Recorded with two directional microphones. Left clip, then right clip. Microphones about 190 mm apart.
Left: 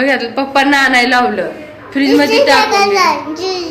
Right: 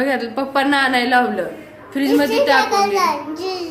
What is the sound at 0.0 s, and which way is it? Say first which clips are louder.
A woman's voice: left 6 dB; 30° right (ahead or behind).